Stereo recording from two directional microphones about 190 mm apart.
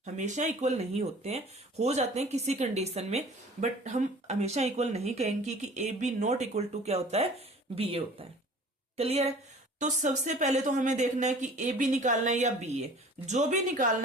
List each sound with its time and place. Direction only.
0.0 s a woman's voice: 40° right (ahead or behind)